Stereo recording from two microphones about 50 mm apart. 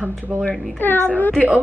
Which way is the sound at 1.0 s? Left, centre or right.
Left.